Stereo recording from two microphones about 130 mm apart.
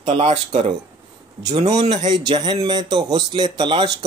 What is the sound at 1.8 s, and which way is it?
Speech, 65° right (ahead or behind).